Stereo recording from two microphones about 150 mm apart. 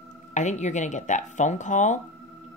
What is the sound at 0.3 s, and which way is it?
Speech, 55° left (ahead or behind).